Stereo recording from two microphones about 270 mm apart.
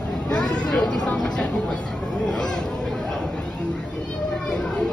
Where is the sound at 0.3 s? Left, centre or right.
Centre.